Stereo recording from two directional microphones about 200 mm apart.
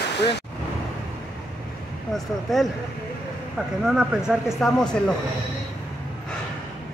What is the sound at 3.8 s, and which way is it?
Speech, 5° right (ahead or behind).